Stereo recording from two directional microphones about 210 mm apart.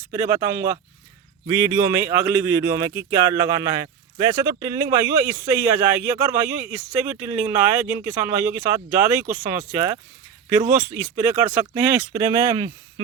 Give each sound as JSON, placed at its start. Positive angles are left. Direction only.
{"t": 0.1, "sound": "speech", "side_deg": -15}